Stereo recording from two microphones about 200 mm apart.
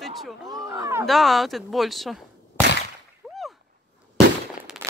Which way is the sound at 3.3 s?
Centre (ahead or behind).